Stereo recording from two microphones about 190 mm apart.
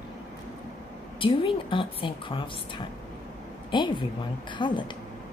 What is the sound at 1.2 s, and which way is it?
A woman's voice, 25° left (ahead or behind).